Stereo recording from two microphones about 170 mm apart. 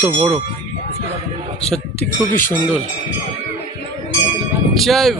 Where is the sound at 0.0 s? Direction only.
5° right (ahead or behind).